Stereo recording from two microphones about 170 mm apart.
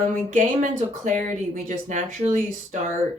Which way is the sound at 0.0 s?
45° right (ahead or behind).